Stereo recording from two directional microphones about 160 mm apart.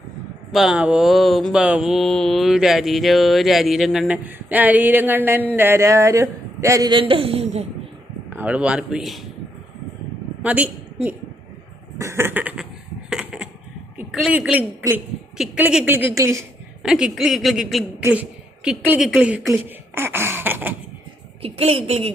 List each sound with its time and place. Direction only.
0.5 s mantra: 5° right (ahead or behind)
5.5 s speech: 15° right (ahead or behind); by 7.7 s 45° right (ahead or behind)
8.4 s a woman's voice: 10° right (ahead or behind)
10.4 s a woman's voice: 10° right (ahead or behind)
13.1 s a sound: 5° right (ahead or behind)
14.1 s a woman's voice: centre (ahead or behind); by 16.5 s 20° right (ahead or behind)
16.8 s mantra: 5° right (ahead or behind)
18.0 s a woman's voice: 10° right (ahead or behind)
18.9 s mantra: 5° right (ahead or behind)
20.0 s a woman's voice: 15° right (ahead or behind)
21.4 s a woman's voice: 40° right (ahead or behind)